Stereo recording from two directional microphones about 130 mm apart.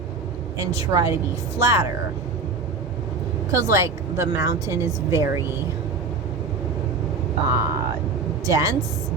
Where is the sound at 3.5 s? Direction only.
25° right (ahead or behind).